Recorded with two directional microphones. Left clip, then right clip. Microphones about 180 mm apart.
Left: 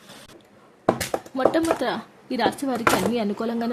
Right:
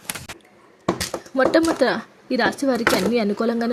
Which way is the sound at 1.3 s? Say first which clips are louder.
Right 4 dB; 20° right (ahead or behind).